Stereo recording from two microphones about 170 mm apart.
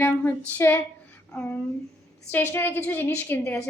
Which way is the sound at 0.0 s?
15° left (ahead or behind).